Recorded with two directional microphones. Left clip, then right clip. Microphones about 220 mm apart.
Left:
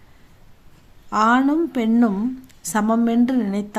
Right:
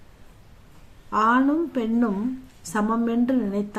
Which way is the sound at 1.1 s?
45° left (ahead or behind).